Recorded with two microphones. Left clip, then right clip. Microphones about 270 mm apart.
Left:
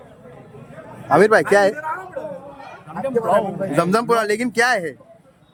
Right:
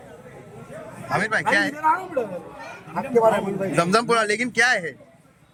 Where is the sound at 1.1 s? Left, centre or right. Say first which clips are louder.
Left 8 dB; left.